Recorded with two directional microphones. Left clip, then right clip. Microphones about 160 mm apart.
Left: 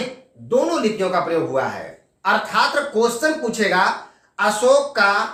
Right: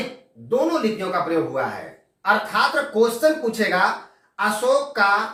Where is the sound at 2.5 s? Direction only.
25° left (ahead or behind).